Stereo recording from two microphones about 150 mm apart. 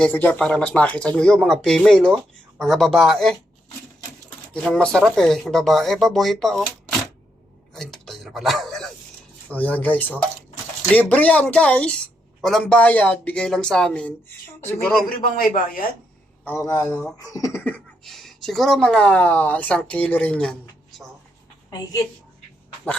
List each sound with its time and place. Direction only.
0.0 s a woman's voice: 10° left (ahead or behind)
4.5 s speech: 5° left (ahead or behind)
7.7 s dog: 5° left (ahead or behind)
9.5 s a woman's voice: 10° left (ahead or behind)
15.1 s speech: 75° left (ahead or behind)
16.4 s speech: 15° left (ahead or behind)
16.9 s speech: 5° left (ahead or behind)
17.2 s speech: 20° left (ahead or behind)
18.0 s a woman's voice: centre (ahead or behind)